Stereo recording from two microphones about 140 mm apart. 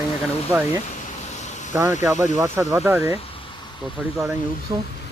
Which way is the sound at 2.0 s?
20° right (ahead or behind).